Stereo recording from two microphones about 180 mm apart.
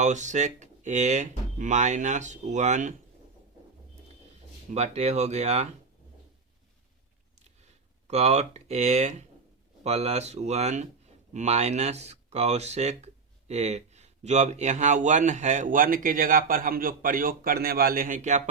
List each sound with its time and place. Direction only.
0.0 s speech: 40° right (ahead or behind)
4.7 s speech: 35° right (ahead or behind)
8.0 s speech: 40° right (ahead or behind)